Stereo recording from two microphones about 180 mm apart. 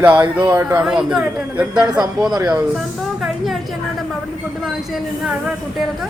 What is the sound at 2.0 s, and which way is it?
Speech, 20° right (ahead or behind).